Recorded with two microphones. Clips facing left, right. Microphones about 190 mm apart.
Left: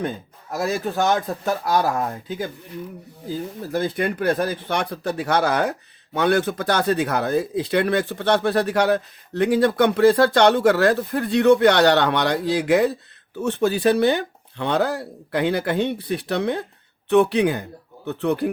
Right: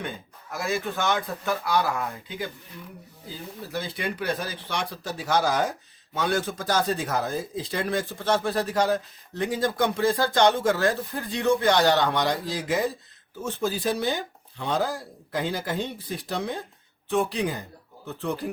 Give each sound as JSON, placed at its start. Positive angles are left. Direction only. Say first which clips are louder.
{"t": 0.5, "sound": "speech", "louder": "left 5 dB", "side_deg": 40}